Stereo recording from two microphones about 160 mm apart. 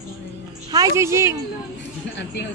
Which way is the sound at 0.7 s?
20° right (ahead or behind).